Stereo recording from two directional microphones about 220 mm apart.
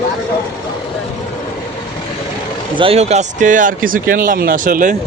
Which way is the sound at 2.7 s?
25° right (ahead or behind).